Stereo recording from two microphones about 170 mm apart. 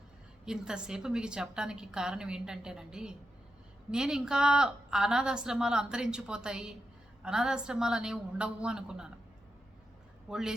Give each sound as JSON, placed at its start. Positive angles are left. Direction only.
{"t": 0.4, "sound": "a woman's voice", "side_deg": -5}
{"t": 10.2, "sound": "a woman's voice", "side_deg": -5}